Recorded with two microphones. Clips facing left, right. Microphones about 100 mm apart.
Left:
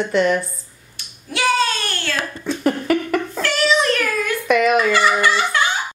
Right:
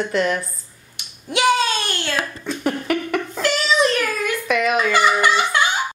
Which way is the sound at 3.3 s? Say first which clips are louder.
Left 1 dB; 15° right (ahead or behind).